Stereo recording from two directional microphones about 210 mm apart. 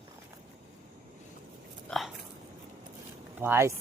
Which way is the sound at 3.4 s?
10° right (ahead or behind).